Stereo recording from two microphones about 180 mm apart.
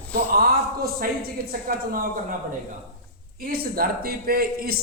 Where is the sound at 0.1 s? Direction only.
55° right (ahead or behind).